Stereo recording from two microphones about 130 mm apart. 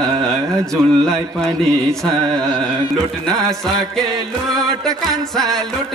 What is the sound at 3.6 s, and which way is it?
Music, centre (ahead or behind).